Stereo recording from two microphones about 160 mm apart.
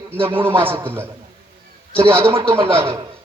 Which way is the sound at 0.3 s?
15° right (ahead or behind).